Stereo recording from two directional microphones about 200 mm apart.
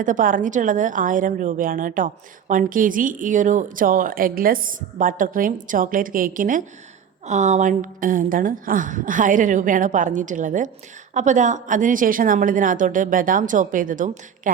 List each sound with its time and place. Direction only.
0.0 s a woman's voice: 40° right (ahead or behind)